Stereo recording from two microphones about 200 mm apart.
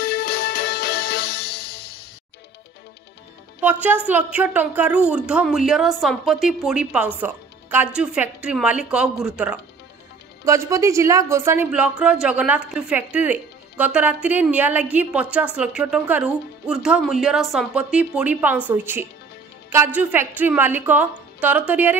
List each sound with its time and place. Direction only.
0.0 s music: 50° left (ahead or behind)
3.6 s a woman's voice: 10° right (ahead or behind)
10.4 s a woman's voice: 15° right (ahead or behind)